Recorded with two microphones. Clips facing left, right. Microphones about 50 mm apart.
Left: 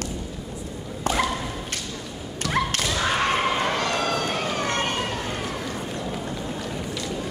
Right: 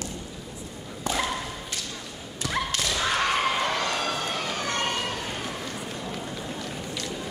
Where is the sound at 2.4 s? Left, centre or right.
Left.